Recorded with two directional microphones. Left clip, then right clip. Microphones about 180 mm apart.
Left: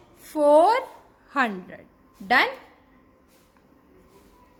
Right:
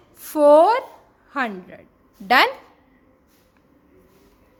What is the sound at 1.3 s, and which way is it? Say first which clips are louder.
Speech: left 1 dB; 5° right (ahead or behind).